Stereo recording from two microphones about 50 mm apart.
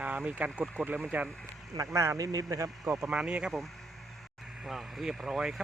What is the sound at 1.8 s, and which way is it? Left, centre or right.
Speech, right.